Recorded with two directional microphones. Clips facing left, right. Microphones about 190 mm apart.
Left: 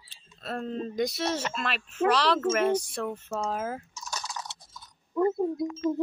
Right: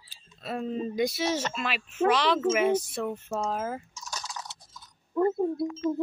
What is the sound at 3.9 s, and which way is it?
Drip, 60° left (ahead or behind).